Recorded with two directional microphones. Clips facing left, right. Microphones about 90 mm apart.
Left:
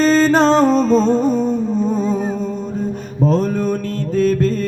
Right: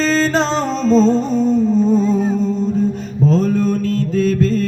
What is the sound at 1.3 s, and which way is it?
Music, 5° left (ahead or behind).